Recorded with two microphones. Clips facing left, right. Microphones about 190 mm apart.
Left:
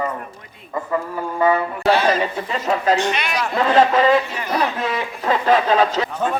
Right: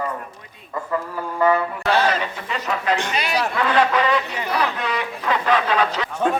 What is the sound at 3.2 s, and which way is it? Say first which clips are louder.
Speech: right 1 dB; 35° right (ahead or behind).